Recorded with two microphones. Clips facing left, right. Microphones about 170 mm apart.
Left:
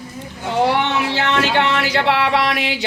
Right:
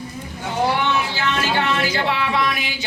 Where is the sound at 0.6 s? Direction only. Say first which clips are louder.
Left 2 dB; 70° left (ahead or behind).